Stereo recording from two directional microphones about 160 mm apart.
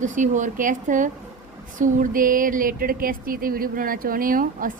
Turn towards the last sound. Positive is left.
turn(degrees=-60)  # may be behind; listen again after turning